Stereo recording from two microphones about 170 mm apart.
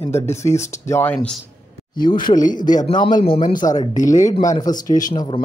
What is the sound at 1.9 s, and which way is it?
Speech, 25° left (ahead or behind).